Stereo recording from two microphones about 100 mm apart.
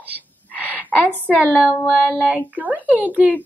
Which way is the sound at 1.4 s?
5° right (ahead or behind).